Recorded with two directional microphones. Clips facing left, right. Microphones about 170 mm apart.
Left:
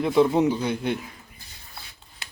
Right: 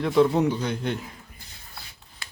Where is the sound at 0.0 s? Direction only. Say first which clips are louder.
Left 1 dB; 5° left (ahead or behind).